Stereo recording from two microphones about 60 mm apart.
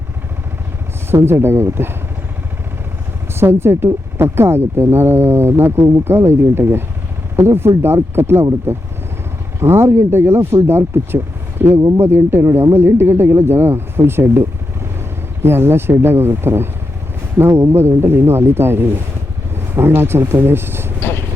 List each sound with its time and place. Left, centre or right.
1.1 s speech: right
3.3 s speech: right
12.5 s speech: right
12.7 s speech: right